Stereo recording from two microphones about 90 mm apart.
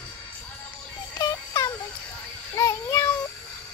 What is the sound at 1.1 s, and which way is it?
Music, 35° left (ahead or behind).